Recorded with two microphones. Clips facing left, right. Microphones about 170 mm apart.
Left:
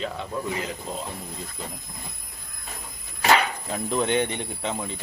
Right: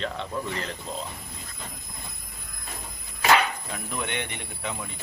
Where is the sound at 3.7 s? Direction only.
30° left (ahead or behind).